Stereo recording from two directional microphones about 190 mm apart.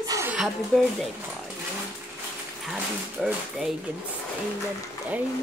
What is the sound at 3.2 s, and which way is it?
Speech, 5° right (ahead or behind).